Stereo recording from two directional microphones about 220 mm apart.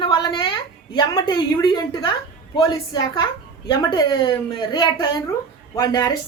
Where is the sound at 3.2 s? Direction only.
20° left (ahead or behind).